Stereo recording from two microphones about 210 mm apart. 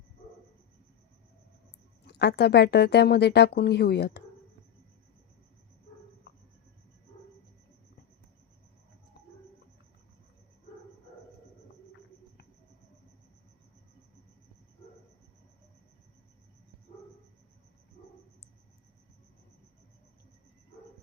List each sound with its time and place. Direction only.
2.0 s speech: 50° left (ahead or behind)